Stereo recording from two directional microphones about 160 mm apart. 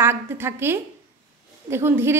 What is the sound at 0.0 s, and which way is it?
A woman's voice, 15° right (ahead or behind).